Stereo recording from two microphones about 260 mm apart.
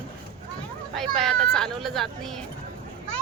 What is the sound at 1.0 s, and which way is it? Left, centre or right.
Speech, centre.